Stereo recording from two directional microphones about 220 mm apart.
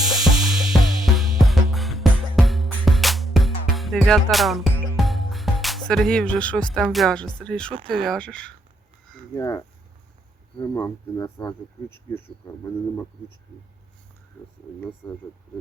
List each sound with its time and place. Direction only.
0.1 s music: centre (ahead or behind)
7.9 s speech: 5° left (ahead or behind)
9.3 s speech: 15° left (ahead or behind)